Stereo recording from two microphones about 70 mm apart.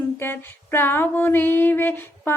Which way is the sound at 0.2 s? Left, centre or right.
Left.